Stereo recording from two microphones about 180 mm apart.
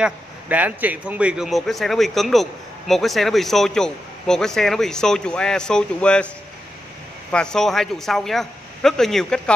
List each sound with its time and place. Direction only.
0.0 s speech: 10° right (ahead or behind)